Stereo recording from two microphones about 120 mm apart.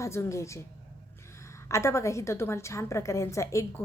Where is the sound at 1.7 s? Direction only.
25° left (ahead or behind).